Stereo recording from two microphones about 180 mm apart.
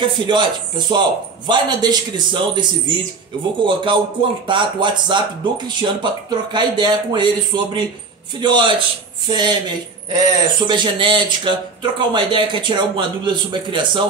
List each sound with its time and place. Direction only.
0.0 s speech: 25° right (ahead or behind)